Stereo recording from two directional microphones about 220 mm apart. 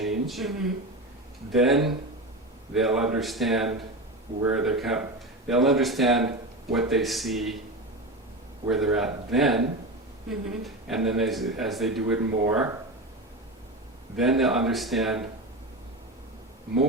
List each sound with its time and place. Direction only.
0.0 s a sound: centre (ahead or behind)
1.5 s speech: centre (ahead or behind)
8.7 s speech: centre (ahead or behind)
14.2 s speech: centre (ahead or behind)